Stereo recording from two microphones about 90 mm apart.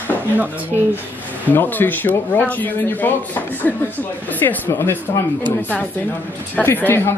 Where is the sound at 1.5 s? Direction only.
20° left (ahead or behind).